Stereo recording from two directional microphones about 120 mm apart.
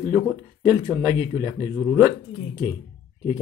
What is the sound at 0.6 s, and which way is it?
Speech, 30° right (ahead or behind).